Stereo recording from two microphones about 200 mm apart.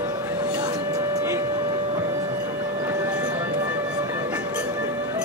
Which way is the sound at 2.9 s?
15° right (ahead or behind).